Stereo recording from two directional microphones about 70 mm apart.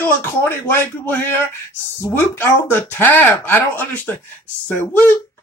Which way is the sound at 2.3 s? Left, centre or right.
Left.